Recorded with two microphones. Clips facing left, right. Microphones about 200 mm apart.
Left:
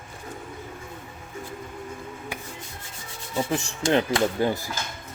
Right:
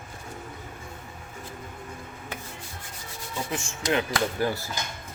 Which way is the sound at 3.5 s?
35° left (ahead or behind).